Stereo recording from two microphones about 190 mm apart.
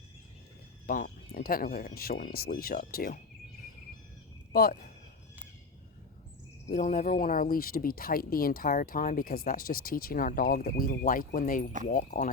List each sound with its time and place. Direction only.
0.9 s speech: 50° left (ahead or behind)
4.5 s speech: 50° left (ahead or behind)
6.7 s speech: 40° left (ahead or behind)